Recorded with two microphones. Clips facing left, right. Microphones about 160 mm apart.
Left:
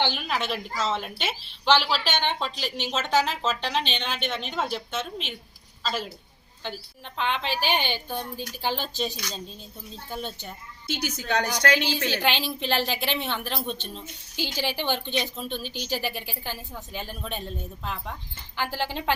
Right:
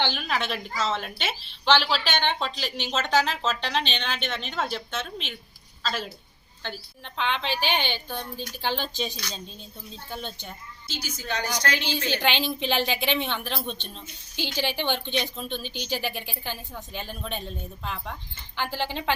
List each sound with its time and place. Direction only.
0.0 s a woman's voice: 5° left (ahead or behind)
10.9 s a woman's voice: 60° left (ahead or behind)
12.1 s a woman's voice: 5° left (ahead or behind)